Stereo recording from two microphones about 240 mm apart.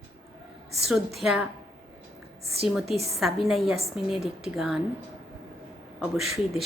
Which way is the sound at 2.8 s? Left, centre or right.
Right.